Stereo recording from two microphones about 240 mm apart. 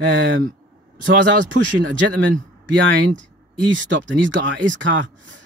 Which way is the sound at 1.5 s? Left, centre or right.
Right.